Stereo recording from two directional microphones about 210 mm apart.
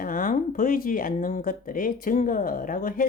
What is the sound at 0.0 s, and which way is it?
Speech, 40° left (ahead or behind).